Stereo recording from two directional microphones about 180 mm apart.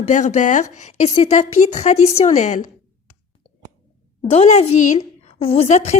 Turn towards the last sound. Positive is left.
turn(degrees=40)  # may be behind; listen again after turning